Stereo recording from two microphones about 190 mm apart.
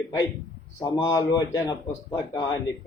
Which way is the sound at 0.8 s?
20° left (ahead or behind).